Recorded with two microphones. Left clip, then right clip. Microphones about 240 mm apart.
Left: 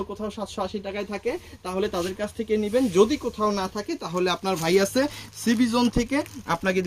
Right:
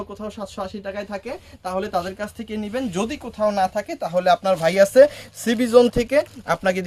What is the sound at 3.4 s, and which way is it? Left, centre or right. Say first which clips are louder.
Speech: right 9 dB; right.